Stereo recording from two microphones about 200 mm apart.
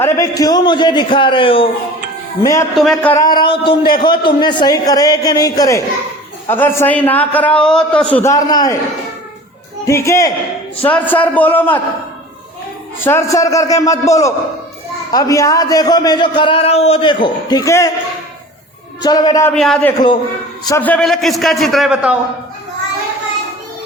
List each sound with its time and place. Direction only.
0.0 s a man's voice: 15° left (ahead or behind)
2.4 s a man's voice: 15° left (ahead or behind)
2.7 s a man's voice: centre (ahead or behind)
3.2 s a man's voice: 20° left (ahead or behind)
9.8 s a man's voice: 15° left (ahead or behind)
13.0 s a man's voice: 10° left (ahead or behind)
19.0 s a man's voice: 20° left (ahead or behind)
19.5 s a man's voice: 5° left (ahead or behind)